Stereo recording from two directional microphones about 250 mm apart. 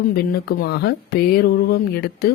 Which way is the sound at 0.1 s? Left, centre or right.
Left.